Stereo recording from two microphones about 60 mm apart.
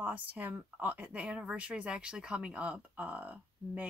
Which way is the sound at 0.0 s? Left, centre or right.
Right.